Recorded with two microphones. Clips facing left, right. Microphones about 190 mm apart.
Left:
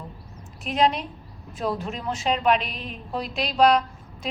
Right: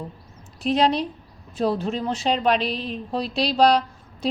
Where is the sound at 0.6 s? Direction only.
35° right (ahead or behind).